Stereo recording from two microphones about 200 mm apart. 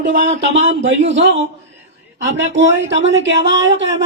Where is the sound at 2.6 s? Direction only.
65° right (ahead or behind).